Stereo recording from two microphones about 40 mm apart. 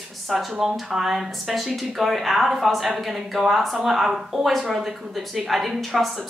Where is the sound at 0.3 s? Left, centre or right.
Centre.